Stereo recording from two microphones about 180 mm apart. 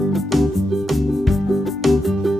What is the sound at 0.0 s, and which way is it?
Music, centre (ahead or behind).